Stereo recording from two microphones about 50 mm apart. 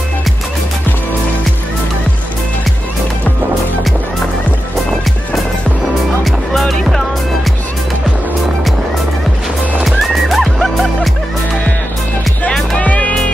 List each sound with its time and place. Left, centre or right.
6.2 s music: centre
9.8 s music: centre
12.7 s music: left